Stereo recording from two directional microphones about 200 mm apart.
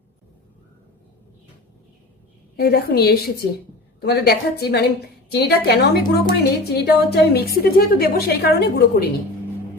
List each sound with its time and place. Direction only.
2.6 s a woman's voice: 50° left (ahead or behind)